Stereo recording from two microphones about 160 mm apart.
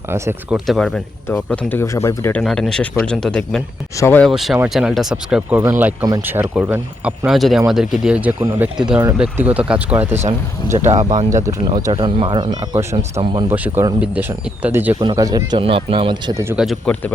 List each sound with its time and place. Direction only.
0.5 s speech: centre (ahead or behind); by 2.4 s 15° left (ahead or behind)
2.4 s speech: centre (ahead or behind)
4.3 s speech: centre (ahead or behind)
10.8 s speech: 45° right (ahead or behind)
11.3 s speech: 20° right (ahead or behind)
11.9 s speech: 35° right (ahead or behind); by 14.9 s 10° right (ahead or behind)
15.0 s speech: 25° right (ahead or behind)
16.3 s speech: 15° right (ahead or behind)
16.6 s speech: centre (ahead or behind)